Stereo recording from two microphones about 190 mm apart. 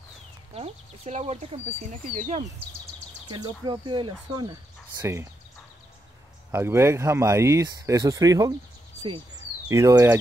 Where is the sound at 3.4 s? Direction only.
25° right (ahead or behind).